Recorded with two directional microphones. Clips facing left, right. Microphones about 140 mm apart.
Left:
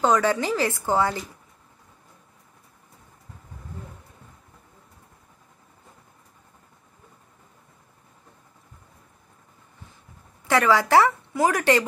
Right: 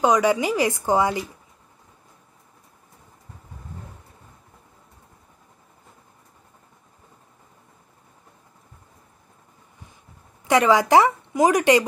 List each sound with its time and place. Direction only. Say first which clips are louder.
0.0 s a woman's voice: right 2 dB; 15° right (ahead or behind)
10.5 s a woman's voice: right 2 dB; 20° right (ahead or behind)